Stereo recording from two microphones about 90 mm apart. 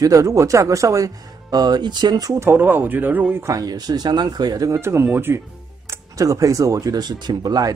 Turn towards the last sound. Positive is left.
turn(degrees=-50)  # may be behind; listen again after turning